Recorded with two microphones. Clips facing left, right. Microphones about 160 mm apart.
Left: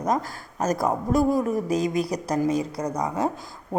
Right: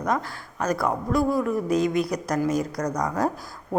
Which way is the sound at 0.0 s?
40° left (ahead or behind).